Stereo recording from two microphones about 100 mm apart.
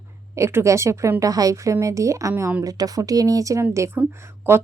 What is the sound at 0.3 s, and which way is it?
A woman's voice, 30° right (ahead or behind).